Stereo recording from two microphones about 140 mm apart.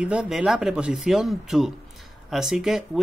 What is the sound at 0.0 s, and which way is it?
Speech, 5° right (ahead or behind).